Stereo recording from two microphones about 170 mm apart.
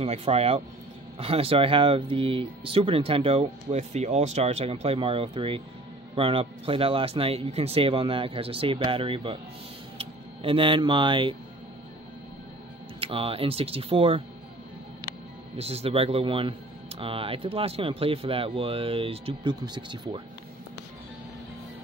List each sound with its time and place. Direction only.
0.0 s speech: 35° right (ahead or behind)
13.0 s speech: 35° right (ahead or behind)
15.5 s speech: 35° right (ahead or behind)